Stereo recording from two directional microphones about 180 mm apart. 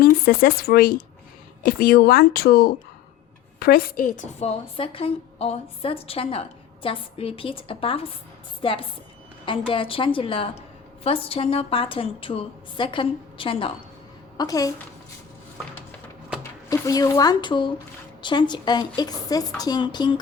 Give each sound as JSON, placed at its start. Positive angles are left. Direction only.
{"t": 0.0, "sound": "a woman's voice", "side_deg": 55}
{"t": 16.4, "sound": "a woman's voice", "side_deg": 15}